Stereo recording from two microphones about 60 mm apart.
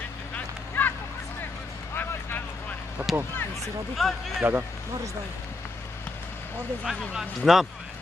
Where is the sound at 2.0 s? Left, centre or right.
Left.